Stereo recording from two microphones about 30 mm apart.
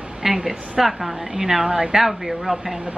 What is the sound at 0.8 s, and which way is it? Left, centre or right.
A woman's voice, centre.